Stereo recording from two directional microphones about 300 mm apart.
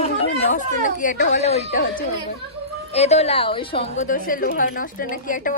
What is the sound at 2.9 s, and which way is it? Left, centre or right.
A woman's voice, left.